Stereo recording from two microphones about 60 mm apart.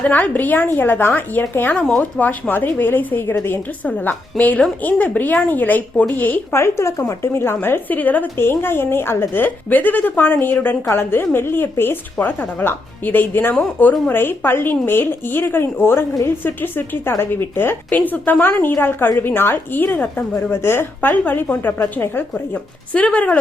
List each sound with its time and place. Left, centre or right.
0.0 s speech: left
3.8 s speech: left
6.5 s speech: left
22.9 s speech: left